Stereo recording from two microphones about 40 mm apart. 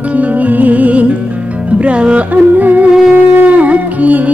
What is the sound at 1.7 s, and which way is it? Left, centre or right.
Speech, right.